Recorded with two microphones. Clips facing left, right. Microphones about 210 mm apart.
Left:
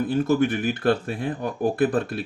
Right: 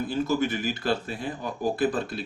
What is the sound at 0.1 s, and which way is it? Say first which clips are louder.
Speech: left 5 dB; 55° left (ahead or behind).